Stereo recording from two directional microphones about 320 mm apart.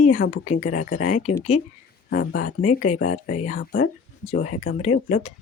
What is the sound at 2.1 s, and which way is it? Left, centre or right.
Speech, left.